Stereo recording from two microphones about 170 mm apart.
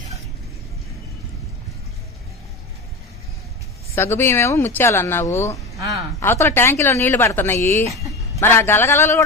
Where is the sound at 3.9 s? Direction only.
15° left (ahead or behind).